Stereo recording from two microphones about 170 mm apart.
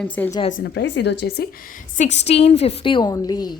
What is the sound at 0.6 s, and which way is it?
Speech, 90° left.